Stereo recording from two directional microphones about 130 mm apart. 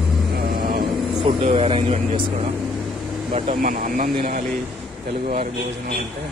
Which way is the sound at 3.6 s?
90° right.